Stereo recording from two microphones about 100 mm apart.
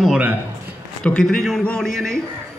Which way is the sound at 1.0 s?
10° left (ahead or behind).